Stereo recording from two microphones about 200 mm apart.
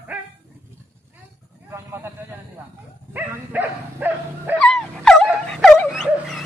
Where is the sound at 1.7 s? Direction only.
10° right (ahead or behind).